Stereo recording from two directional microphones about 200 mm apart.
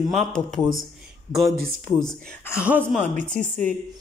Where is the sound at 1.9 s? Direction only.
5° left (ahead or behind).